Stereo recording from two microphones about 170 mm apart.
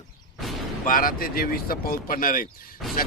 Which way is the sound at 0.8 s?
55° left (ahead or behind).